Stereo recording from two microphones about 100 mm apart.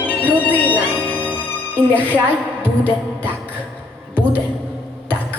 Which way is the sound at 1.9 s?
15° left (ahead or behind).